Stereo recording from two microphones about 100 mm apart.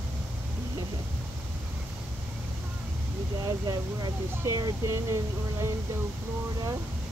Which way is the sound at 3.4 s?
40° right (ahead or behind).